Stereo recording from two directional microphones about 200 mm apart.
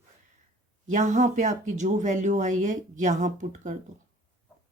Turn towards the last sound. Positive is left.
turn(degrees=-40)  # may be behind; listen again after turning